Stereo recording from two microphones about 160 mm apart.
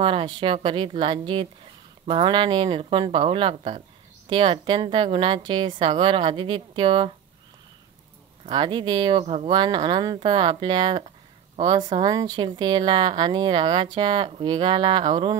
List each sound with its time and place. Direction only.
0.0 s a woman's voice: 30° right (ahead or behind)
8.5 s speech: 30° right (ahead or behind)